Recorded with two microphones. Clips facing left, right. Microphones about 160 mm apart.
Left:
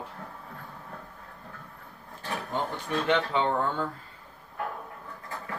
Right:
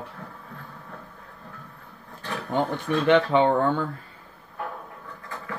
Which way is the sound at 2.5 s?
60° right (ahead or behind).